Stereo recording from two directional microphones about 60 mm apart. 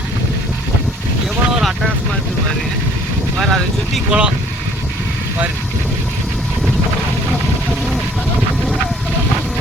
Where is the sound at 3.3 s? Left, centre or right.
Centre.